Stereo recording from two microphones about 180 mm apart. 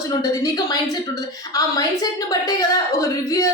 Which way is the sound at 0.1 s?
20° left (ahead or behind).